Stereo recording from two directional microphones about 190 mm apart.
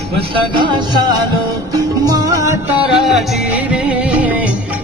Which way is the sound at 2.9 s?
Centre (ahead or behind).